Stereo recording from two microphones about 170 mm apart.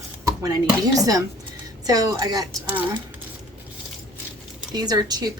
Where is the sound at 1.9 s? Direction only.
20° right (ahead or behind).